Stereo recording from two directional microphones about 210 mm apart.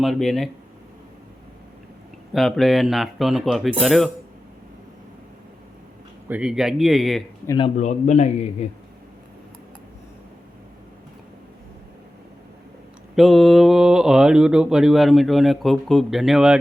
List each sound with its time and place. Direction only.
0.0 s speech: centre (ahead or behind)
2.3 s speech: centre (ahead or behind)
6.2 s speech: 5° right (ahead or behind)
7.4 s a man's voice: 20° left (ahead or behind)
7.8 s a man's voice: 35° left (ahead or behind)
13.1 s speech: centre (ahead or behind)